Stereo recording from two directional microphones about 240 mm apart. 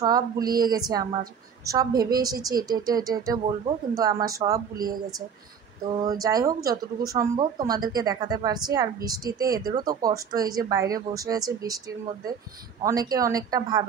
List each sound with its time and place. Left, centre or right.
0.0 s speech: centre
5.9 s speech: centre
12.8 s speech: centre